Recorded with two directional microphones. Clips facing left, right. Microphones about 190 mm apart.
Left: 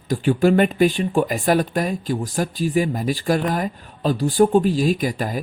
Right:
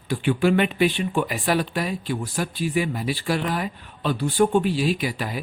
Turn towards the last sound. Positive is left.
turn(degrees=45)  # may be behind; listen again after turning